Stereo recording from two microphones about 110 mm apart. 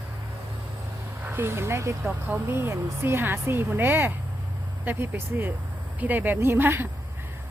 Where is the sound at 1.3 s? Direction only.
20° right (ahead or behind).